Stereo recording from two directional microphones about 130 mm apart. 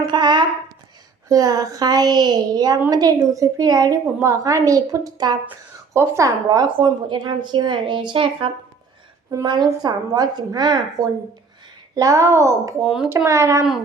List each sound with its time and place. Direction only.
0.0 s a woman's voice: 35° right (ahead or behind)
6.7 s a woman's voice: 35° right (ahead or behind)
9.3 s a woman's voice: 30° right (ahead or behind)
12.8 s a child's voice: 5° right (ahead or behind)
13.1 s a woman's voice: 25° right (ahead or behind)